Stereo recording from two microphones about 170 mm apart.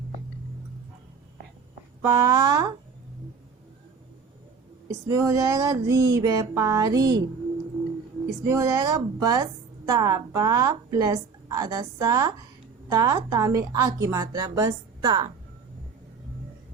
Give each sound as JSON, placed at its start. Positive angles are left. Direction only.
{"t": 2.0, "sound": "a woman's voice", "side_deg": -20}
{"t": 4.9, "sound": "a woman's voice", "side_deg": -15}
{"t": 8.4, "sound": "a woman's voice", "side_deg": -15}